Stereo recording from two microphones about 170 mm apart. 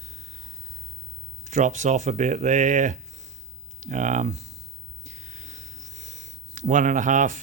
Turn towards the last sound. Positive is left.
turn(degrees=-45)  # may be behind; listen again after turning